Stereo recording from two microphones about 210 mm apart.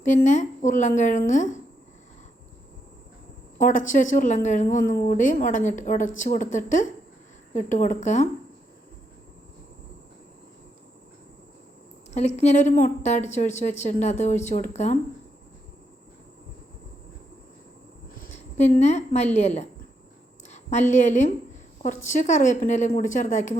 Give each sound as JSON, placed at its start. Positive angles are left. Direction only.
{"t": 0.3, "sound": "a woman's voice", "side_deg": 35}
{"t": 3.6, "sound": "a woman's voice", "side_deg": 40}
{"t": 12.1, "sound": "a woman's voice", "side_deg": 30}
{"t": 18.2, "sound": "a sound", "side_deg": 35}
{"t": 18.8, "sound": "a woman's voice", "side_deg": 30}